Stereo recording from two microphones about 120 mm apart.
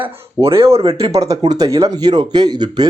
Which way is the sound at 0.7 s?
55° right (ahead or behind).